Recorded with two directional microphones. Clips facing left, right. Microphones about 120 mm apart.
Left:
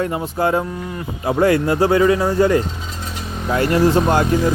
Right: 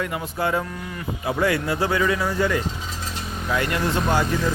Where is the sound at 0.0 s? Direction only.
35° left (ahead or behind).